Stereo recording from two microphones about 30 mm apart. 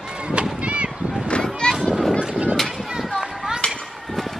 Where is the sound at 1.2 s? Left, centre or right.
Left.